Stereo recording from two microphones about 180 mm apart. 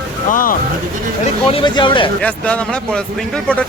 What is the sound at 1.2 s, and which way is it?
Speech, 30° left (ahead or behind).